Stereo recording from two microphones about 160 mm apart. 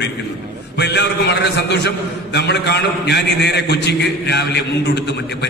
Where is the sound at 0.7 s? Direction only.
90° left.